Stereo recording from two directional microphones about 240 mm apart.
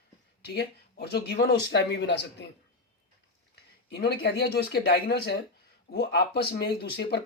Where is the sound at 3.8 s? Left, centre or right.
Left.